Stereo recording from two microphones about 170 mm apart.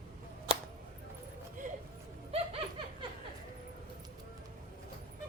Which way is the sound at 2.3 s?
35° right (ahead or behind).